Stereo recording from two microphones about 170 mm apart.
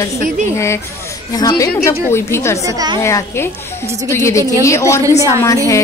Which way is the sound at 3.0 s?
15° left (ahead or behind).